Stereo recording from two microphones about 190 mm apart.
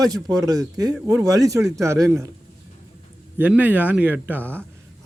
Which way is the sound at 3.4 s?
10° right (ahead or behind).